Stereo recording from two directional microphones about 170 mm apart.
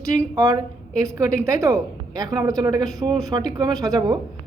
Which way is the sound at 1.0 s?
20° right (ahead or behind).